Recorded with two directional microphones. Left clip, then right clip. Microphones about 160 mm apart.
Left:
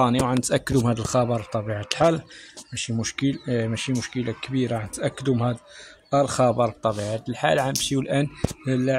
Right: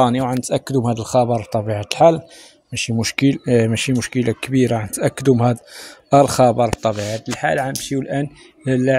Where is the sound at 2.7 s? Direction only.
35° right (ahead or behind).